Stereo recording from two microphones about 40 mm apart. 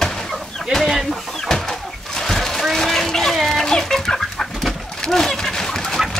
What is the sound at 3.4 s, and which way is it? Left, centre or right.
Chicken, centre.